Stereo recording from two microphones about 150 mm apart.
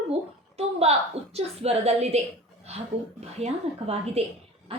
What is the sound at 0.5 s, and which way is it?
A woman's voice, 45° right (ahead or behind).